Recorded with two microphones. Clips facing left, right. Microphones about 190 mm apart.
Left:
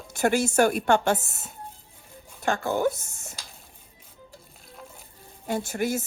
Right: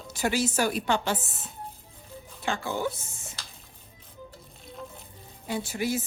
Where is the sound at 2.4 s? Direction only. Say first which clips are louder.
Left 5 dB; 55° left (ahead or behind).